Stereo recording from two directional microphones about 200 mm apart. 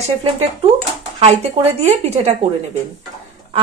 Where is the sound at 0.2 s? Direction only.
30° right (ahead or behind).